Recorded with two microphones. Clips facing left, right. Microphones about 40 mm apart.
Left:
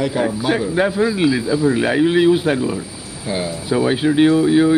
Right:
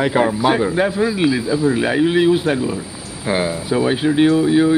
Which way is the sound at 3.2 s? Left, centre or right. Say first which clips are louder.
Right 4 dB; right.